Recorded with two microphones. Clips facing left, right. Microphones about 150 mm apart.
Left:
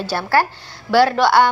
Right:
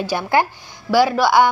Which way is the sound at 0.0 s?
15° right (ahead or behind).